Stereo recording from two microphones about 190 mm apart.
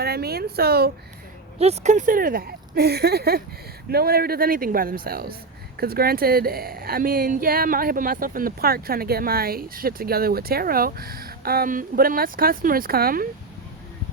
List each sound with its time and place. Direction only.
0.0 s speech: 55° right (ahead or behind)
1.5 s speech: 35° right (ahead or behind); by 13.2 s 50° right (ahead or behind)